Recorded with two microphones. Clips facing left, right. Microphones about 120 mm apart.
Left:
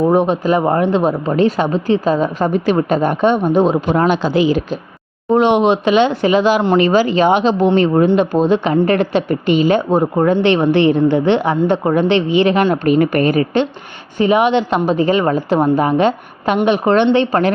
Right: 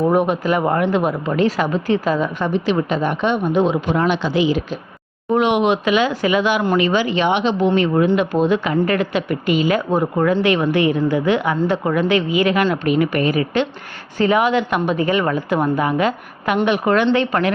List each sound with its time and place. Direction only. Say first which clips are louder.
0.1 s speech: left 3 dB; 25° left (ahead or behind)
2.5 s speech: left 3 dB; 45° left (ahead or behind); by 12.6 s 30° left (ahead or behind)
12.7 s speech: left 4 dB; 40° left (ahead or behind)
14.2 s speech: left 3 dB; 25° left (ahead or behind)